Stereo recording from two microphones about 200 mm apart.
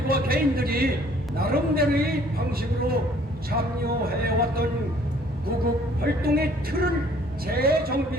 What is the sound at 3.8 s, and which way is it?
Speech, 50° right (ahead or behind).